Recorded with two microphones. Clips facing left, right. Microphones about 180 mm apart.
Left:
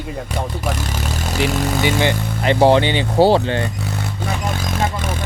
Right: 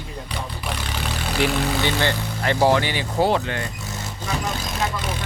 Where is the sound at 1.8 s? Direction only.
15° left (ahead or behind).